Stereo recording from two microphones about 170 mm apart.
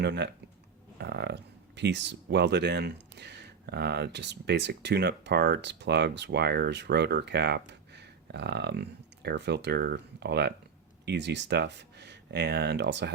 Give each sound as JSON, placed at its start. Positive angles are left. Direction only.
{"t": 0.0, "sound": "speech", "side_deg": -85}
{"t": 0.9, "sound": "speech", "side_deg": -75}